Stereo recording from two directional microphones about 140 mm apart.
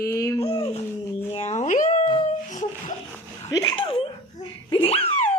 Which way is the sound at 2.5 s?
65° left (ahead or behind).